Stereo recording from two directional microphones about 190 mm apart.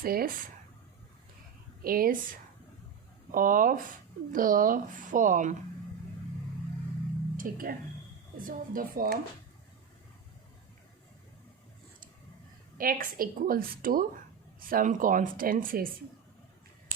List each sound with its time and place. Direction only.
0.0 s a woman's voice: 50° right (ahead or behind)
1.8 s a woman's voice: 50° right (ahead or behind)
3.3 s a woman's voice: 45° right (ahead or behind)
7.3 s a woman's voice: 50° right (ahead or behind)
12.7 s a woman's voice: 50° right (ahead or behind)